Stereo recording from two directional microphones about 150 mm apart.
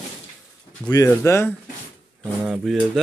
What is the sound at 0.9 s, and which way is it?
Speech, 20° left (ahead or behind).